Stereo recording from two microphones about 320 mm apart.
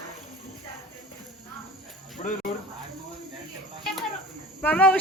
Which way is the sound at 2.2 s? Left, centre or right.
Left.